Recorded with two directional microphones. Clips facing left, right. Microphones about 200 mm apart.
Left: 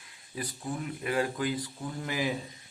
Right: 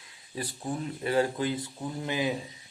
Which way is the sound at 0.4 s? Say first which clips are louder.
Right 2 dB; 30° right (ahead or behind).